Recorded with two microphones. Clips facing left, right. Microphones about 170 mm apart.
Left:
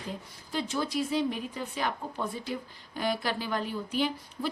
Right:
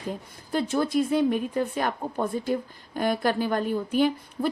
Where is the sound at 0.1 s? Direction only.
50° right (ahead or behind).